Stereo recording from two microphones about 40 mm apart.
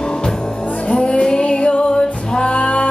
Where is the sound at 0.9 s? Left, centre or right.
Left.